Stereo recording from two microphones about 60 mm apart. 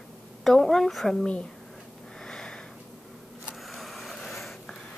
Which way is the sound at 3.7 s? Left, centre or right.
Centre.